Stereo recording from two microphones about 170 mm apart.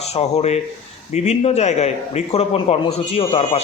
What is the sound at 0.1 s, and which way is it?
A man's voice, 40° left (ahead or behind).